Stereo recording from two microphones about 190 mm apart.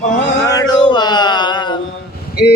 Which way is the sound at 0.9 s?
25° left (ahead or behind).